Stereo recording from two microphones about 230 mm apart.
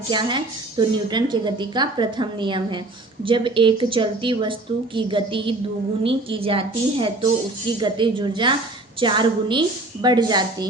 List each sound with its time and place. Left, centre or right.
0.1 s a woman's voice: centre